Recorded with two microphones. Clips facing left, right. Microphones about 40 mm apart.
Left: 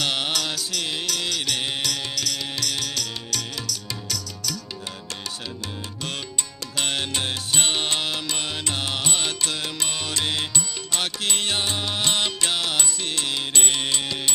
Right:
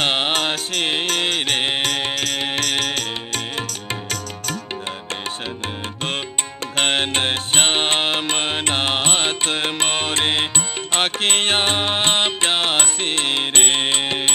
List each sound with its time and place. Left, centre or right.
0.0 s music: right
6.8 s music: right